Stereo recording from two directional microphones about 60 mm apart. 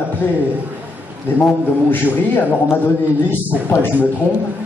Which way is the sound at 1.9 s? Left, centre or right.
Left.